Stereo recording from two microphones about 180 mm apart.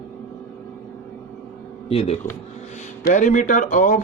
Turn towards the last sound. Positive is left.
turn(degrees=45)  # may be behind; listen again after turning